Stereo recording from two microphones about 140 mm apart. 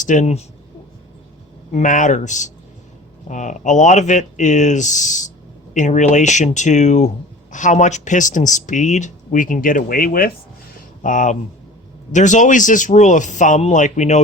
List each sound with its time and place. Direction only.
0.0 s speech: 60° left (ahead or behind)
1.7 s speech: 65° left (ahead or behind); by 10.3 s 90° left
11.0 s speech: 65° left (ahead or behind)